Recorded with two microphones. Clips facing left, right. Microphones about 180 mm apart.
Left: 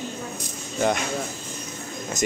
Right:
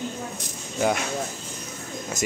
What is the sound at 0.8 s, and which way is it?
Speech, 5° right (ahead or behind).